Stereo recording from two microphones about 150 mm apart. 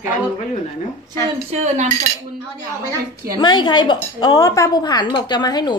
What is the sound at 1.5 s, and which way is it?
Cutlery, 50° right (ahead or behind).